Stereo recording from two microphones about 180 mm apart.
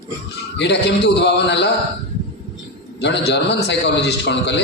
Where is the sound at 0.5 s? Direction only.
70° left (ahead or behind).